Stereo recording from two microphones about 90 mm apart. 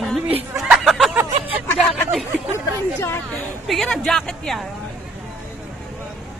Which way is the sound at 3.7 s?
5° left (ahead or behind).